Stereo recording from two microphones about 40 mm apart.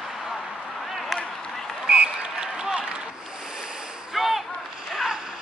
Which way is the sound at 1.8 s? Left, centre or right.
Right.